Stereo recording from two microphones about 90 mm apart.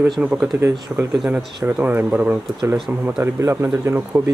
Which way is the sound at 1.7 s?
15° right (ahead or behind).